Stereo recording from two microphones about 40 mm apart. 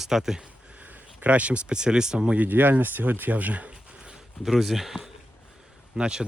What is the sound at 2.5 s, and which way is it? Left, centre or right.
Speech, right.